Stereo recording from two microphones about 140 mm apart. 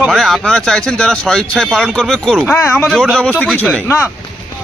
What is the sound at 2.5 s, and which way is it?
A man's voice, 10° left (ahead or behind).